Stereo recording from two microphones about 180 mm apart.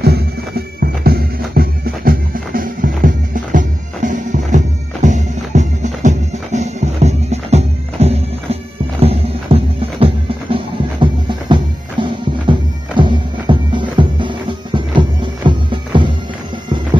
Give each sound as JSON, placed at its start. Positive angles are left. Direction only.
{"t": 0.0, "sound": "music", "side_deg": -60}